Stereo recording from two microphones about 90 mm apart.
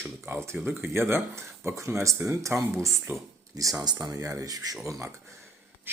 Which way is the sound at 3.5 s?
40° right (ahead or behind).